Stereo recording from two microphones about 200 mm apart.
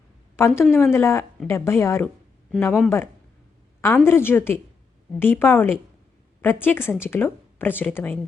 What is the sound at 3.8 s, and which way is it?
Speech, 10° left (ahead or behind).